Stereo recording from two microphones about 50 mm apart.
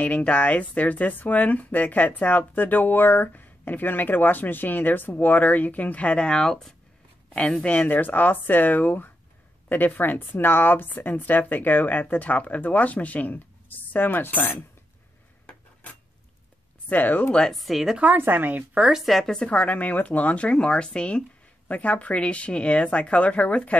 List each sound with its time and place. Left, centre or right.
0.0 s a woman's voice: left; by 6.7 s centre
7.3 s speech: left
16.9 s speech: left
17.3 s speech: centre
17.6 s a woman's voice: centre
18.1 s a woman's voice: right
18.8 s speech: centre
19.0 s speech: centre
19.5 s a woman's voice: left